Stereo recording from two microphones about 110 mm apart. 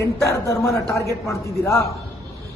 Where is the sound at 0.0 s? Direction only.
25° left (ahead or behind).